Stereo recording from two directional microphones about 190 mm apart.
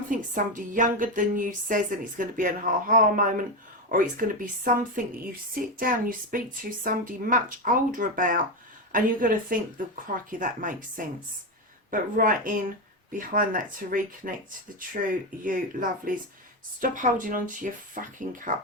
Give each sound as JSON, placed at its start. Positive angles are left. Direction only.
{"t": 0.1, "sound": "speech", "side_deg": -45}
{"t": 15.4, "sound": "speech", "side_deg": -45}